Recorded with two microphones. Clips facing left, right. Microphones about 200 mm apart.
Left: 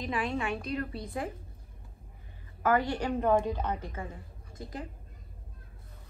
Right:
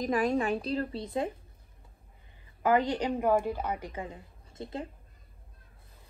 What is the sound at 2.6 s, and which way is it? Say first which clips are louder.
A woman's voice: right 2 dB; 20° right (ahead or behind).